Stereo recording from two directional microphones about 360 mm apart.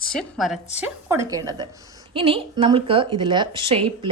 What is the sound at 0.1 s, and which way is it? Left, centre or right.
A woman's voice, centre.